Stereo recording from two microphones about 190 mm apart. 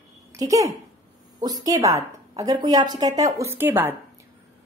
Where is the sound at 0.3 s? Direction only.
15° right (ahead or behind).